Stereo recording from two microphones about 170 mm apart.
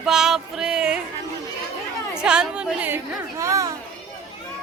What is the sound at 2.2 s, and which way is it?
Speech, 5° right (ahead or behind).